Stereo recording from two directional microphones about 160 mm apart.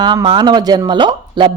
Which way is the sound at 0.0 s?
30° right (ahead or behind).